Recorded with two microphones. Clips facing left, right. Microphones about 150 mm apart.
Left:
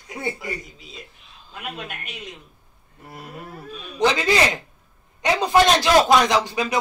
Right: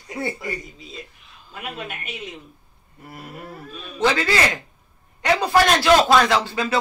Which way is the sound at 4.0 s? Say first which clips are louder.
Left 1 dB; 15° left (ahead or behind).